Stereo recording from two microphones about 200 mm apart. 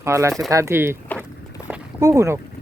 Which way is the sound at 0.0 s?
15° right (ahead or behind).